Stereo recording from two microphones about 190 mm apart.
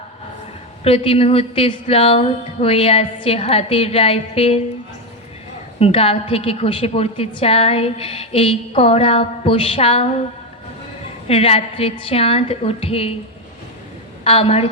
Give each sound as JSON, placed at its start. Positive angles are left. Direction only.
{"t": 0.9, "sound": "a woman's voice", "side_deg": 30}
{"t": 5.8, "sound": "a woman's voice", "side_deg": 30}
{"t": 11.3, "sound": "a woman's voice", "side_deg": 30}
{"t": 14.3, "sound": "a woman's voice", "side_deg": 30}